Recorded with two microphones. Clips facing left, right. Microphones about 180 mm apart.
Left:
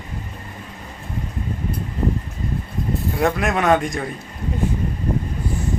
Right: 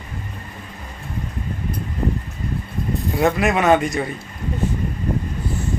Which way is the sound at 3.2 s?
5° right (ahead or behind).